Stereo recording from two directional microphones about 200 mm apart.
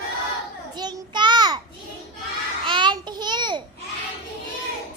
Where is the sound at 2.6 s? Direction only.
25° right (ahead or behind).